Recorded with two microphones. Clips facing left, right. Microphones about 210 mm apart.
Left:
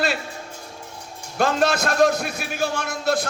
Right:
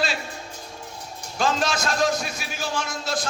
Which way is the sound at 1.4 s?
60° left (ahead or behind).